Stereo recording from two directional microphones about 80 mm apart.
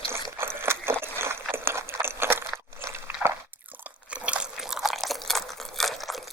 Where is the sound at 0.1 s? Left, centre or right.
Right.